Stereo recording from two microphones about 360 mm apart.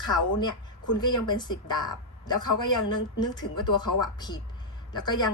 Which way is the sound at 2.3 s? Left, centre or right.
Left.